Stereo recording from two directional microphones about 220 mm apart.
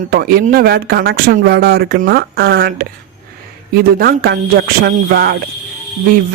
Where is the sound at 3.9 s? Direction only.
40° right (ahead or behind).